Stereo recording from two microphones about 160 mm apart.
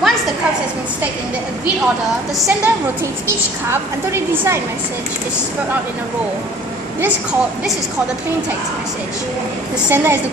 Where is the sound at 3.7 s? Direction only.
15° right (ahead or behind).